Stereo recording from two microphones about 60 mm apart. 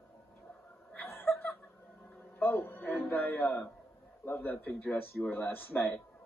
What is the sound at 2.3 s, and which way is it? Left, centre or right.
A man's voice, left.